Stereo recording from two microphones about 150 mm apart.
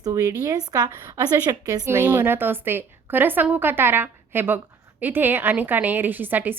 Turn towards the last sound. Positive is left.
turn(degrees=-10)  # may be behind; listen again after turning